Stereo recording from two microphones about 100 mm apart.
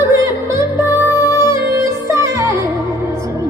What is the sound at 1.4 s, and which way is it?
Music, 30° right (ahead or behind).